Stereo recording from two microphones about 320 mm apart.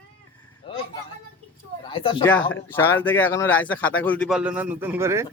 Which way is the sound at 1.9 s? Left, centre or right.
Centre.